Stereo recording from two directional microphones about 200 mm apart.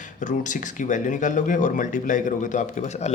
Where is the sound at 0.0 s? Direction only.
40° left (ahead or behind).